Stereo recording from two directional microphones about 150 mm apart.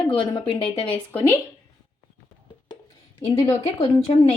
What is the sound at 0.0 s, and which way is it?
Speech, 35° left (ahead or behind).